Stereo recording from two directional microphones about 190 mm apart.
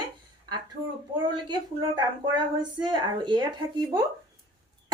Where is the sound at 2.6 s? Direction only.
25° right (ahead or behind).